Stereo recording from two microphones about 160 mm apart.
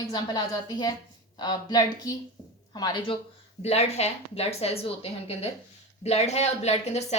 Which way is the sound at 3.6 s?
40° left (ahead or behind).